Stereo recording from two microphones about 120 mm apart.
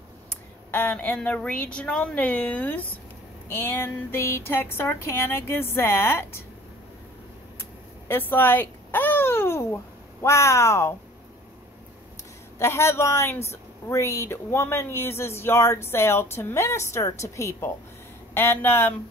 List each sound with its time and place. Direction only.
0.7 s a woman's voice: 15° left (ahead or behind)
8.1 s a sound: 15° left (ahead or behind)
10.2 s speech: 25° left (ahead or behind)
12.5 s speech: 20° left (ahead or behind)